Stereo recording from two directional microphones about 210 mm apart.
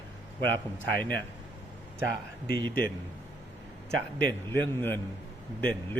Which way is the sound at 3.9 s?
10° left (ahead or behind).